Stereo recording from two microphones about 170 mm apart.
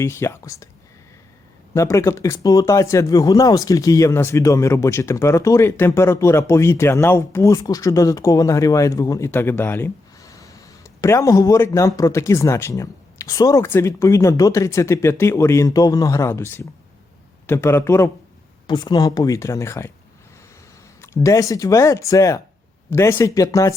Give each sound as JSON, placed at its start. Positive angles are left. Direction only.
{"t": 0.0, "sound": "speech", "side_deg": 15}
{"t": 1.7, "sound": "speech", "side_deg": 15}
{"t": 18.7, "sound": "speech", "side_deg": 25}
{"t": 21.0, "sound": "speech", "side_deg": 15}